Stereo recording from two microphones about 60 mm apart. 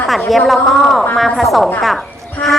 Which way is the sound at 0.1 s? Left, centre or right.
Centre.